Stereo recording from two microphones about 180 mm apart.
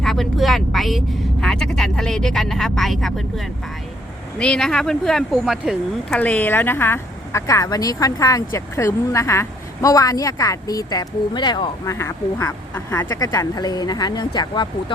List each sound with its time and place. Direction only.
0.0 s speech: centre (ahead or behind); by 14.9 s 25° left (ahead or behind)